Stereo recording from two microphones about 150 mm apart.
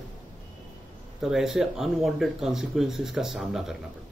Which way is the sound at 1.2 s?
Centre (ahead or behind).